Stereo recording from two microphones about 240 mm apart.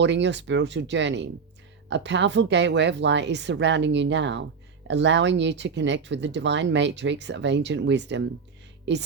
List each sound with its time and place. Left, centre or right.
0.0 s speech: right